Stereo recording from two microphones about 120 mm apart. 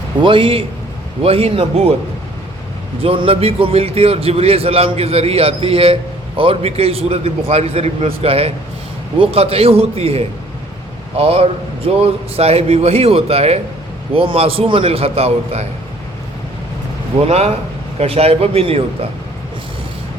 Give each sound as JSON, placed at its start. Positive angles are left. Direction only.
{"t": 0.2, "sound": "a man's voice", "side_deg": -45}
{"t": 3.0, "sound": "a man's voice", "side_deg": -50}
{"t": 17.2, "sound": "a man's voice", "side_deg": -60}